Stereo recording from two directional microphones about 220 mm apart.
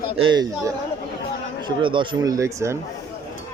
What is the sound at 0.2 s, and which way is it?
Speech, 20° right (ahead or behind).